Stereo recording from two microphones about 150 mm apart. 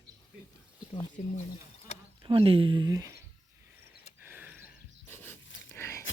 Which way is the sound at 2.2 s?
35° right (ahead or behind).